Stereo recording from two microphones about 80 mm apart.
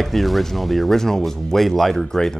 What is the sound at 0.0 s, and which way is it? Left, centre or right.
Speech, centre.